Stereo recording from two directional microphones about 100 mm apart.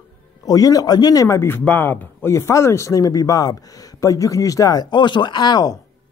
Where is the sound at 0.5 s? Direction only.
40° left (ahead or behind).